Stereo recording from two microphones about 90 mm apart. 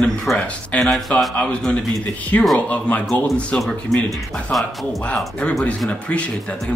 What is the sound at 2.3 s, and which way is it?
Speech, 20° left (ahead or behind).